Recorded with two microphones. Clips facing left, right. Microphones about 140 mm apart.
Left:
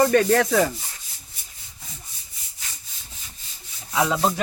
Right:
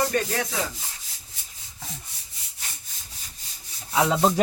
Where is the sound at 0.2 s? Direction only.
50° left (ahead or behind).